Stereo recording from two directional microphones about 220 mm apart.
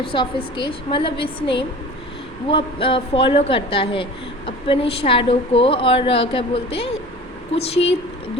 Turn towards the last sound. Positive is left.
turn(degrees=25)  # may be behind; listen again after turning